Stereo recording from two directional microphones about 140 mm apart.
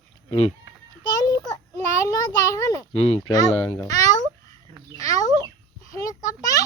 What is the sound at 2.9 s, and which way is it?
Speech, 45° left (ahead or behind).